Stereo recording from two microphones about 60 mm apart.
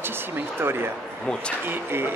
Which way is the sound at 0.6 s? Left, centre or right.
Right.